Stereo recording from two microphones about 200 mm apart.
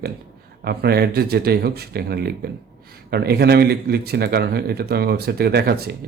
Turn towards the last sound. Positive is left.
turn(degrees=-50)  # may be behind; listen again after turning